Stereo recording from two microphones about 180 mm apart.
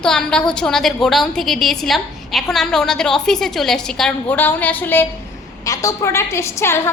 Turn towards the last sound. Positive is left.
turn(degrees=15)  # may be behind; listen again after turning